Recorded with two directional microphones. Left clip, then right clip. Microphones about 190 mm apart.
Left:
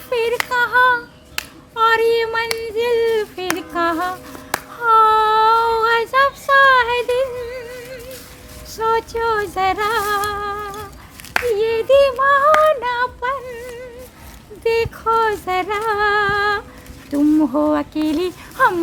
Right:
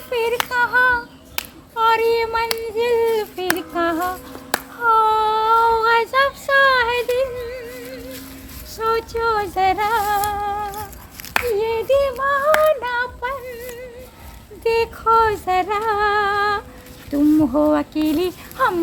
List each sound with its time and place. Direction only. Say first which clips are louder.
0.1 s female singing: left 2 dB; 25° left (ahead or behind)
1.7 s child singing: left 2 dB; 20° left (ahead or behind)
2.7 s a sound: left 1 dB; 10° left (ahead or behind)
3.6 s music: left 5 dB; 25° left (ahead or behind)
4.5 s a sound: right 1 dB; 15° right (ahead or behind)
4.9 s child singing: left 3 dB; 25° left (ahead or behind)
8.7 s speech: left 2 dB; 10° left (ahead or behind)
10.0 s music: even; 30° left (ahead or behind)
11.5 s child singing: left 5 dB; 25° left (ahead or behind)
12.6 s female singing: left 2 dB; 20° left (ahead or behind)
14.6 s speech: even; 5° left (ahead or behind)